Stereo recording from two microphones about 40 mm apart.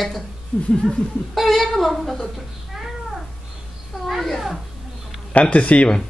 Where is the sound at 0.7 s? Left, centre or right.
Centre.